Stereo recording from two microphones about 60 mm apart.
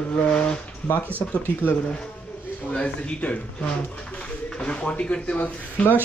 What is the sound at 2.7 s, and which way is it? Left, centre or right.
Speech, centre.